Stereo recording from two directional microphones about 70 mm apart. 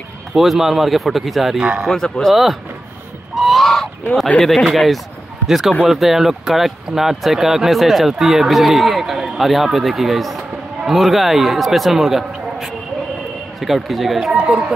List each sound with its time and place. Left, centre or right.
0.3 s speech: centre
1.9 s speech: centre
3.3 s goose: centre
4.7 s speech: centre
14.3 s speech: centre